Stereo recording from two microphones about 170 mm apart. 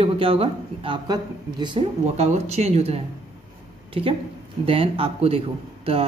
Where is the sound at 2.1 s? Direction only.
40° right (ahead or behind).